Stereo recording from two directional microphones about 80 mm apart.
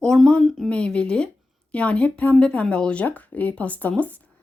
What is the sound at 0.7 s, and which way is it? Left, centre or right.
Speech, centre.